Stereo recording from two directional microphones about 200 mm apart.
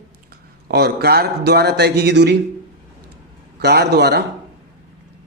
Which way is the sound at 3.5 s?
55° right (ahead or behind).